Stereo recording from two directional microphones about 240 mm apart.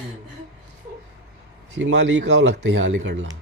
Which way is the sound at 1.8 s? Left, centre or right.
Right.